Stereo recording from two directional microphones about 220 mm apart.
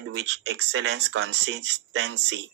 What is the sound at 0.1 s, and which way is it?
Speech, 55° right (ahead or behind).